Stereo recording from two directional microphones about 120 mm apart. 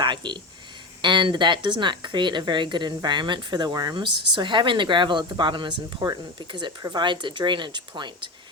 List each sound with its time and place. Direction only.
0.0 s speech: 40° right (ahead or behind)